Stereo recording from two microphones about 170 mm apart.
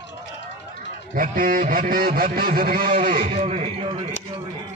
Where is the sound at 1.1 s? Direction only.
50° right (ahead or behind).